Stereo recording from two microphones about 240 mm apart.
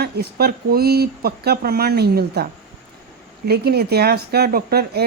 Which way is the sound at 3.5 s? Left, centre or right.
Right.